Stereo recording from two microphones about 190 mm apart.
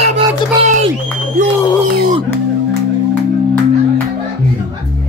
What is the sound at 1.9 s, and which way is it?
Music, 50° right (ahead or behind).